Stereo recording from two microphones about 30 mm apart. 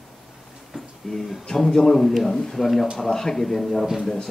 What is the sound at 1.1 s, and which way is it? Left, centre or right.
Speech, centre.